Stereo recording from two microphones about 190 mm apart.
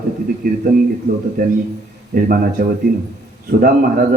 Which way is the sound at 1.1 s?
50° right (ahead or behind).